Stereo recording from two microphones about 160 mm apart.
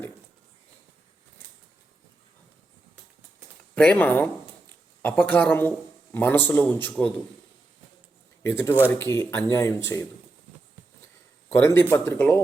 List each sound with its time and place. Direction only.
3.8 s a man's voice: 10° left (ahead or behind)
8.4 s a man's voice: 15° left (ahead or behind)
11.5 s a man's voice: 15° left (ahead or behind)